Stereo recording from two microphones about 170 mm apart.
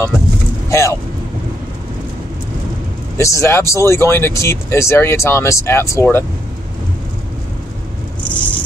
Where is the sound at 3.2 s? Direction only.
15° left (ahead or behind).